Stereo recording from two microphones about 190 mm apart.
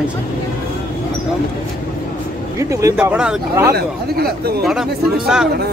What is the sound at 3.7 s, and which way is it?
Speech, 55° right (ahead or behind).